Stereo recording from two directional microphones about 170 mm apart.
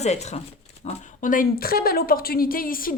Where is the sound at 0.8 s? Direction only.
50° left (ahead or behind).